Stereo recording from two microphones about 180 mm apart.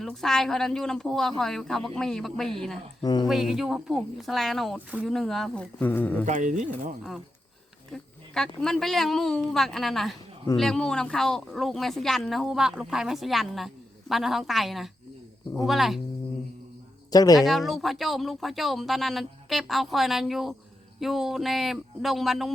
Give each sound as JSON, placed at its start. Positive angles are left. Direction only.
{"t": 0.0, "sound": "speech", "side_deg": 0}
{"t": 3.0, "sound": "speech", "side_deg": 20}
{"t": 3.2, "sound": "speech", "side_deg": 0}
{"t": 6.2, "sound": "speech", "side_deg": -45}
{"t": 7.9, "sound": "speech", "side_deg": 5}
{"t": 17.1, "sound": "speech", "side_deg": 20}
{"t": 17.4, "sound": "speech", "side_deg": 0}